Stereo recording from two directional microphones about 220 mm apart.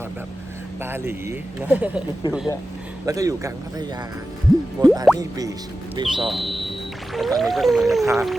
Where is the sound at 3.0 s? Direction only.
15° right (ahead or behind).